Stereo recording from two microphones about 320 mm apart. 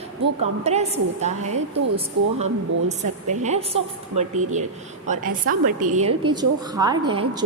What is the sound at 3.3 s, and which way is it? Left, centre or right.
A woman's voice, right.